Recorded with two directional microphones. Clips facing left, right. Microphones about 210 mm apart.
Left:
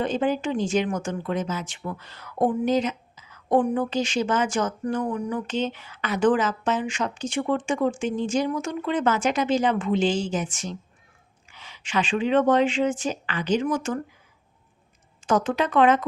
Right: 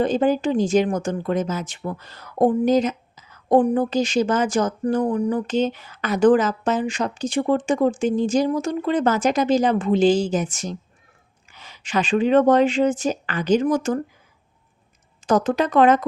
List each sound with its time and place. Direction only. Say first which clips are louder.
0.0 s speech: right 5 dB; 35° right (ahead or behind)
15.3 s speech: right 4 dB; 40° right (ahead or behind)